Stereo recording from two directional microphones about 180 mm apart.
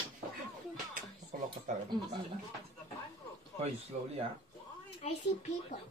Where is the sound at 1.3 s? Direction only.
50° right (ahead or behind).